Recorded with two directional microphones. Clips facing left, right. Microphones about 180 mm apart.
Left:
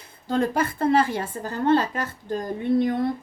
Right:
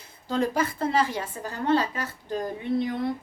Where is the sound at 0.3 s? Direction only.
55° left (ahead or behind).